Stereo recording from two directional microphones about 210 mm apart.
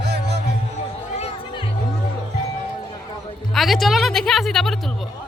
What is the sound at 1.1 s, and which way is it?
Music, 30° left (ahead or behind).